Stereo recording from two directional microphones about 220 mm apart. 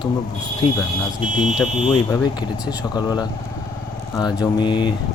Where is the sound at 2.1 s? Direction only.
20° left (ahead or behind).